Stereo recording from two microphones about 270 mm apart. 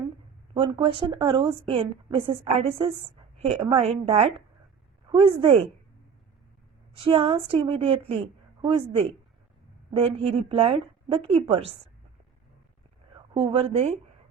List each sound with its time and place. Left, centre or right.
0.5 s a woman's voice: centre
6.9 s speech: centre
13.1 s a woman's voice: centre